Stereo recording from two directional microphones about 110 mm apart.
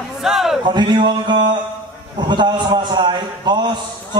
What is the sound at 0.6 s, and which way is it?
A man's voice, 45° right (ahead or behind).